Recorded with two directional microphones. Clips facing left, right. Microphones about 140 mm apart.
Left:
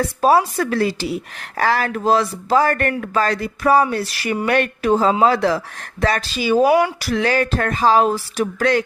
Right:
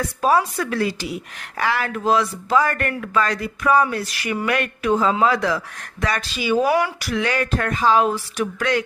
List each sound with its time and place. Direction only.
0.2 s speech: 35° left (ahead or behind)